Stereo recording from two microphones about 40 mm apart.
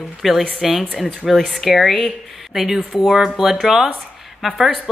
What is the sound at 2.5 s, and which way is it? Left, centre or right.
A woman's voice, centre.